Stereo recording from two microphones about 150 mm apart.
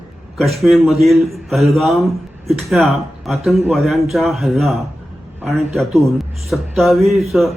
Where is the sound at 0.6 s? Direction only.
Centre (ahead or behind).